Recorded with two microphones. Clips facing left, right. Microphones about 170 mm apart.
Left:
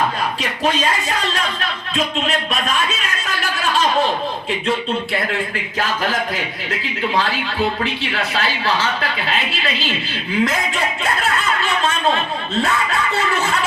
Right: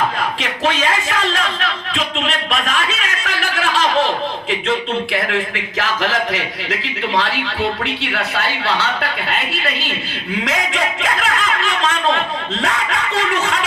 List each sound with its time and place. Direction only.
3.2 s a sound: 90° right
5.8 s speech: 90° right
7.9 s a woman's voice: 65° right (ahead or behind)
10.4 s speech: 90° right
12.6 s music: 90° right